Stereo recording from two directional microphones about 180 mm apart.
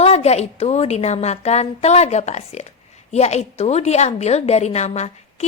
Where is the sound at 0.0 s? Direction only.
35° left (ahead or behind).